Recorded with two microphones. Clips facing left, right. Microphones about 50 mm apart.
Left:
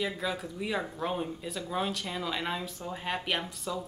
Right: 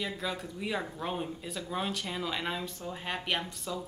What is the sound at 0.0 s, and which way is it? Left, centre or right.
Speech, centre.